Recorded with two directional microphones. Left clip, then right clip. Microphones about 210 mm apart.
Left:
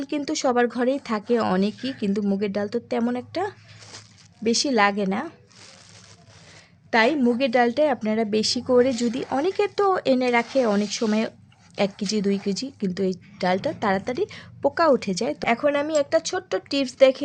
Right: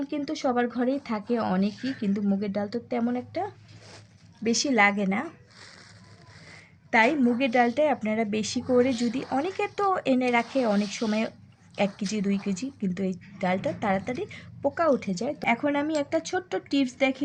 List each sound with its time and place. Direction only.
0.0 s a woman's voice: 35° left (ahead or behind)
6.9 s a woman's voice: 30° left (ahead or behind)